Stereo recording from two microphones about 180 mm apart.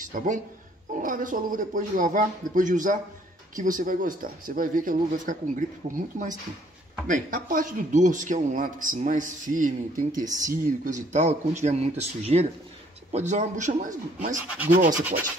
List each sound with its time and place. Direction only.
0.1 s speech: 50° right (ahead or behind)